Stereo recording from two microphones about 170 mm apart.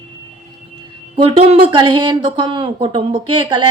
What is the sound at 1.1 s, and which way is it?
A woman's voice, 35° right (ahead or behind).